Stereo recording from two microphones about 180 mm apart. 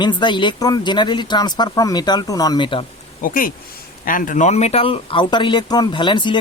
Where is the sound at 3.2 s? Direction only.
50° left (ahead or behind).